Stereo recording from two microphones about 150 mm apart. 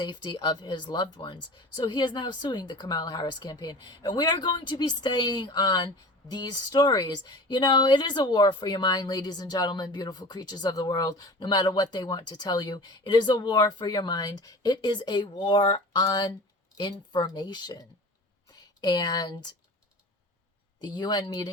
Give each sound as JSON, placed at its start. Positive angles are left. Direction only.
{"t": 0.0, "sound": "speech", "side_deg": 30}
{"t": 20.8, "sound": "speech", "side_deg": 30}